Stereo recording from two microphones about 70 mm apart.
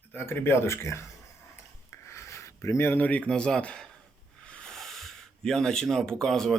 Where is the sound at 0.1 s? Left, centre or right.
Left.